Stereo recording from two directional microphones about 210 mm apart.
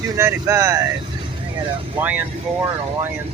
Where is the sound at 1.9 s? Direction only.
10° right (ahead or behind).